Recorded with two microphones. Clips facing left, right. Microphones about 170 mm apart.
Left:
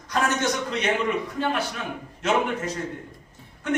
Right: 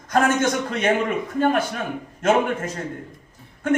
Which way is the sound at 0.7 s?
50° right (ahead or behind).